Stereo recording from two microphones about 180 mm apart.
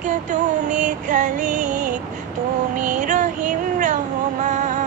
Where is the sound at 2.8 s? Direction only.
45° right (ahead or behind).